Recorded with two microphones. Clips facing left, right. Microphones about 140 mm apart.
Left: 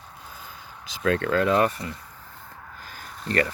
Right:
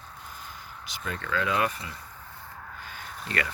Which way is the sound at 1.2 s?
45° left (ahead or behind).